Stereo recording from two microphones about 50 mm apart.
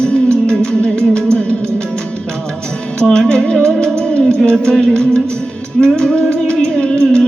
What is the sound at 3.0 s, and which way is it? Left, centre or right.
Music, centre.